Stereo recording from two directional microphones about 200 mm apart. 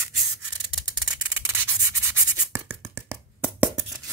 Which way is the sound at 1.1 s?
15° right (ahead or behind).